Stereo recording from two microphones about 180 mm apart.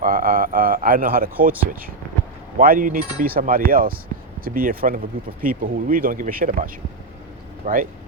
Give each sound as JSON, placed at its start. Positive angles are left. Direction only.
{"t": 0.0, "sound": "a man's voice", "side_deg": -50}
{"t": 2.6, "sound": "speech", "side_deg": -50}